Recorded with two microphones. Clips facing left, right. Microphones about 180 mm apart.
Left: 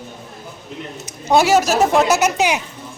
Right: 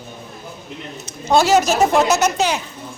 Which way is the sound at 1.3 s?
10° left (ahead or behind).